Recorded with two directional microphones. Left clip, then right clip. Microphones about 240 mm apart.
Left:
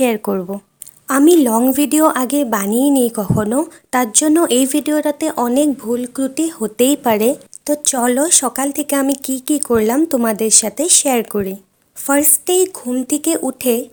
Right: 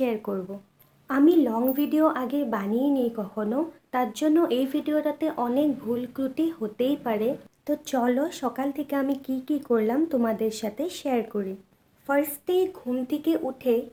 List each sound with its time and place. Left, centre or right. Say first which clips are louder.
0.0 s a woman's voice: left 11 dB; left